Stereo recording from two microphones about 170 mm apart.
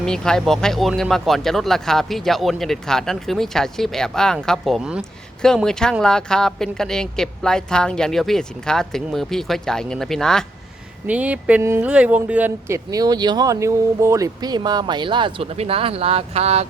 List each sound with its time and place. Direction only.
0.0 s speech: 5° left (ahead or behind)
11.0 s speech: 10° right (ahead or behind); by 16.6 s 40° right (ahead or behind)